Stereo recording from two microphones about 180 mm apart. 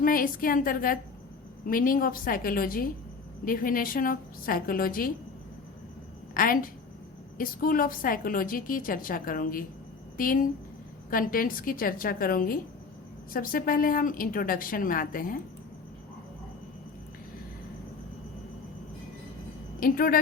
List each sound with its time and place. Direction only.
0.0 s a woman's voice: 50° left (ahead or behind)
6.3 s a woman's voice: 50° left (ahead or behind)
19.8 s a woman's voice: 50° left (ahead or behind)